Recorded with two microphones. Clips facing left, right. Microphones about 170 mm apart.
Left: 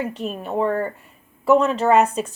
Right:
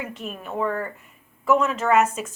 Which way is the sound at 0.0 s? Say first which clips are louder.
Left 6 dB; 35° left (ahead or behind).